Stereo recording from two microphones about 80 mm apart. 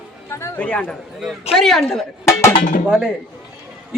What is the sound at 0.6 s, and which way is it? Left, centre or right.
Speech, centre.